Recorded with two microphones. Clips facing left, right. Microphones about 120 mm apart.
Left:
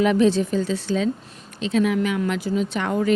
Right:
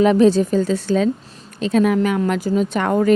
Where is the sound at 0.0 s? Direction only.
40° right (ahead or behind).